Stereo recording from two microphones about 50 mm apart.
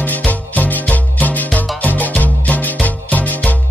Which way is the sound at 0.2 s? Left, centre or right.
Left.